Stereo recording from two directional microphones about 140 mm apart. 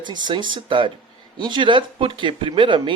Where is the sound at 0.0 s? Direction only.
35° right (ahead or behind).